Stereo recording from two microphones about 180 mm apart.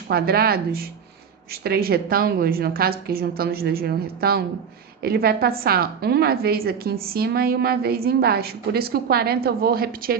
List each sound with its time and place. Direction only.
0.1 s a woman's voice: 60° right (ahead or behind)